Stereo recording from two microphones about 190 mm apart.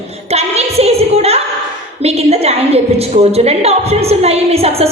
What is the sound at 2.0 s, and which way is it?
A woman's voice, 35° right (ahead or behind).